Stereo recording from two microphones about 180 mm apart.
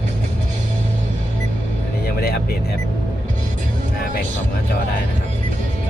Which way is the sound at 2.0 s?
60° left (ahead or behind).